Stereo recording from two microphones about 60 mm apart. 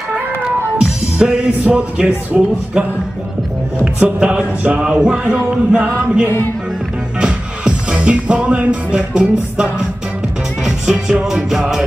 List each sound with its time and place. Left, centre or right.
0.1 s music: centre
2.3 s speech: right
3.8 s music: centre
7.2 s music: centre